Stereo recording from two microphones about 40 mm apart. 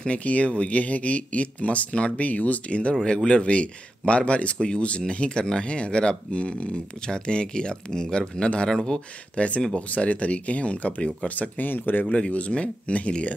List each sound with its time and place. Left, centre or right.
0.1 s speech: left; by 9.0 s centre
9.4 s speech: left
12.3 s speech: left